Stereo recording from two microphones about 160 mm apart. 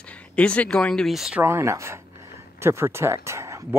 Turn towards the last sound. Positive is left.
turn(degrees=-20)  # may be behind; listen again after turning